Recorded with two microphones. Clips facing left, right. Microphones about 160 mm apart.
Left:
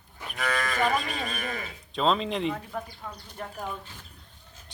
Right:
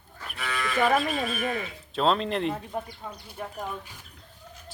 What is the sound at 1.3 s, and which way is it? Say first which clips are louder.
Speech: right 5 dB; 40° left (ahead or behind).